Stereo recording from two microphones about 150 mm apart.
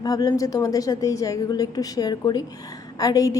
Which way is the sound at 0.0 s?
25° left (ahead or behind).